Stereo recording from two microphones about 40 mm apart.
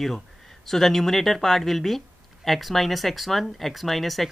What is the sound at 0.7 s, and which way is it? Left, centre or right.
Speech, centre.